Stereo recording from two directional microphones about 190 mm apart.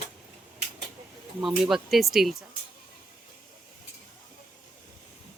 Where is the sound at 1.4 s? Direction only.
5° right (ahead or behind).